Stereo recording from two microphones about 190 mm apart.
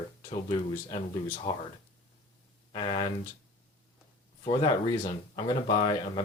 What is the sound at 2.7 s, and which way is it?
Speech, 25° left (ahead or behind).